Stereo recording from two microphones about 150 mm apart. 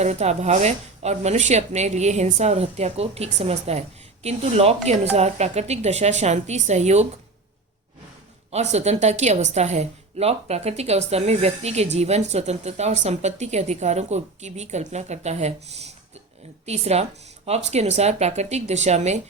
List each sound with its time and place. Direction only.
0.0 s a woman's voice: 45° right (ahead or behind)
8.5 s a woman's voice: 45° right (ahead or behind)